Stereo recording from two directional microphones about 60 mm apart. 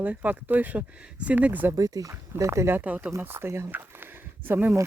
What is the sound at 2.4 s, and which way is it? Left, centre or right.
Speech, right.